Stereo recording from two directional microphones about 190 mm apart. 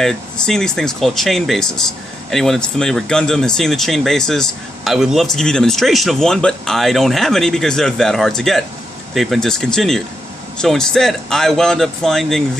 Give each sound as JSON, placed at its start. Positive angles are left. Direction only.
{"t": 0.0, "sound": "speech", "side_deg": 0}